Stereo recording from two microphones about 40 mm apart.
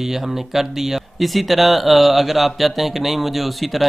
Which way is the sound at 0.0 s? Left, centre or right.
Centre.